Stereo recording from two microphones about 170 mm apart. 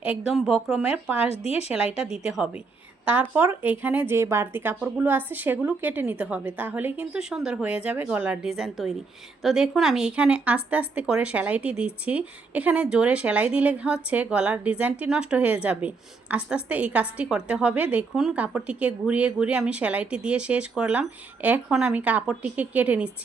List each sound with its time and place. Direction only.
0.3 s speech: 5° right (ahead or behind)
1.3 s a woman's voice: 35° left (ahead or behind)
2.0 s speech: 5° right (ahead or behind)